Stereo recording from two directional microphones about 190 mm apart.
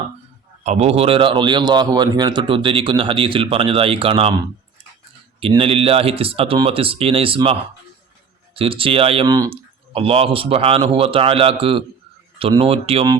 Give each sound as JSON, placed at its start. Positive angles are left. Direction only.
{"t": 0.6, "sound": "speech", "side_deg": -35}
{"t": 5.4, "sound": "speech", "side_deg": -30}